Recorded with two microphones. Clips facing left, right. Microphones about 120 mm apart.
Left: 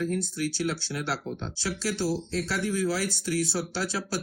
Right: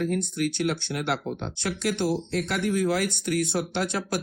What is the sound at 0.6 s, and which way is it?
Speech, 55° right (ahead or behind).